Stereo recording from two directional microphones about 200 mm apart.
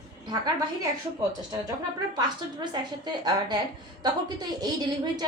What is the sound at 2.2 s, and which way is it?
A woman's voice, 20° right (ahead or behind).